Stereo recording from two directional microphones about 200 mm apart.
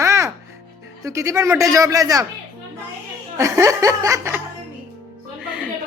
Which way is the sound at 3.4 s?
15° right (ahead or behind).